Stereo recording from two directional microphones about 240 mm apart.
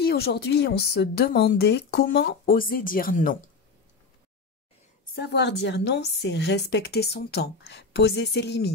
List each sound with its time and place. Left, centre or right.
0.0 s speech: left
5.1 s a woman's voice: left